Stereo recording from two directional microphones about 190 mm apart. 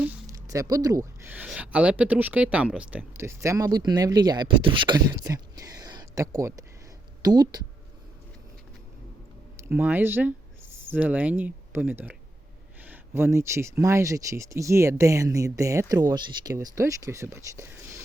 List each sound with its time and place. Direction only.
0.0 s speech: 15° right (ahead or behind)
9.6 s speech: 10° right (ahead or behind)